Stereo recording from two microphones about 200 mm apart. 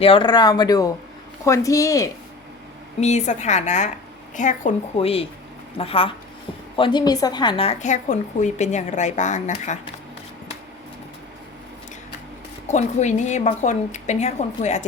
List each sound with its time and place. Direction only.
0.0 s a woman's voice: 25° left (ahead or behind)
3.0 s a woman's voice: 35° left (ahead or behind)
12.6 s a woman's voice: 35° left (ahead or behind)